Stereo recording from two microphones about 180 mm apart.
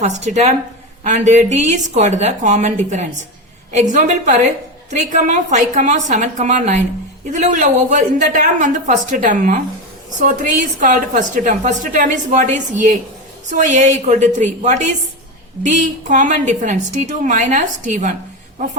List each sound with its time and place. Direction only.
0.3 s a woman's voice: 40° right (ahead or behind)